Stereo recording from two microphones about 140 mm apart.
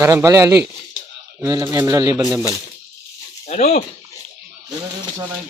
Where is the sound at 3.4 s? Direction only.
50° left (ahead or behind).